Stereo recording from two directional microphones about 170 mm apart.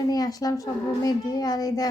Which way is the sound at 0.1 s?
20° left (ahead or behind).